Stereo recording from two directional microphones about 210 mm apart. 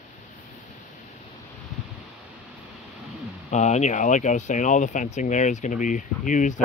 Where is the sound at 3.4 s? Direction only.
35° left (ahead or behind).